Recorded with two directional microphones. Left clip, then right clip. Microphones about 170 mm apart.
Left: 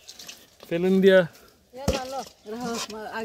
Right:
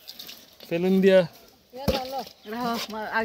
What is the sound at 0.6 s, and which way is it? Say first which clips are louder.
Speech: left 1 dB; 5° right (ahead or behind).